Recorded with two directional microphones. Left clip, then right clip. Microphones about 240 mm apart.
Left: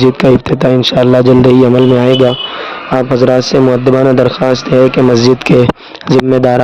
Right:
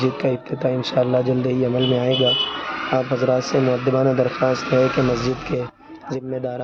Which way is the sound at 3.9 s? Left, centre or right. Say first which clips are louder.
Left 10 dB; left.